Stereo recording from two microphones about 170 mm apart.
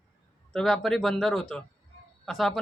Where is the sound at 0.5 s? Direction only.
Centre (ahead or behind).